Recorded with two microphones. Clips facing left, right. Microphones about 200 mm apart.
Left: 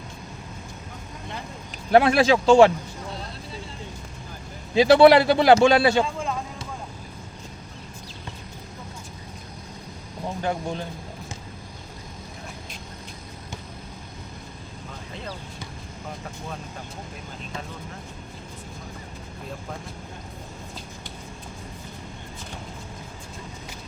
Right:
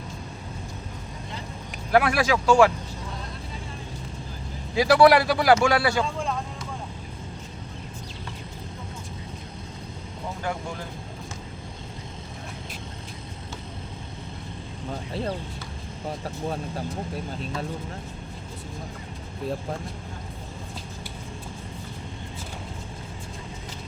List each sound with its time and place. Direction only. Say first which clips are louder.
1.9 s a man's voice: left 4 dB; 25° left (ahead or behind)
4.7 s a man's voice: left 3 dB; 25° left (ahead or behind)
10.4 s a man's voice: left 4 dB; 25° left (ahead or behind)
16.0 s speech: right 6 dB; 35° right (ahead or behind)